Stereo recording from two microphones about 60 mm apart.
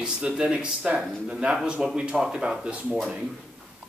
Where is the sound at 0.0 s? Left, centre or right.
Centre.